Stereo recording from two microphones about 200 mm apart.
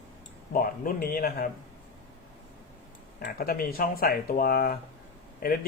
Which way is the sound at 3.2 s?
50° left (ahead or behind).